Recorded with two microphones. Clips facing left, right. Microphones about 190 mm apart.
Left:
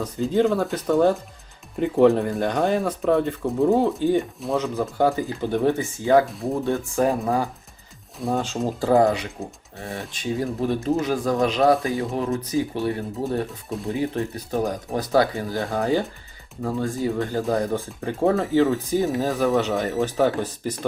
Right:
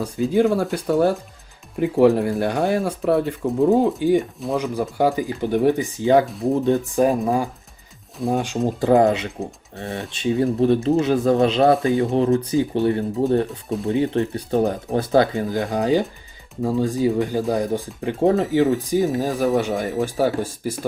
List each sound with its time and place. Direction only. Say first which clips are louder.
0.0 s speech: right 2 dB; 10° right (ahead or behind)
4.2 s speech: right 1 dB; centre (ahead or behind)
4.5 s speech: right 1 dB; 10° right (ahead or behind)
6.2 s speech: right 5 dB; centre (ahead or behind)
6.7 s speech: right 3 dB; 15° right (ahead or behind)
12.1 s speech: right 6 dB; 30° right (ahead or behind)
13.7 s speech: right 5 dB; centre (ahead or behind)
13.9 s speech: right 5 dB; 25° right (ahead or behind); by 20.7 s 10° right (ahead or behind)